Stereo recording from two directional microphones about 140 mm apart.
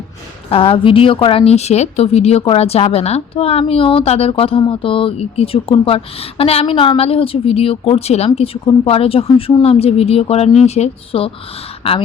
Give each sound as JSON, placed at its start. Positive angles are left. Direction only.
{"t": 0.5, "sound": "a woman's voice", "side_deg": 40}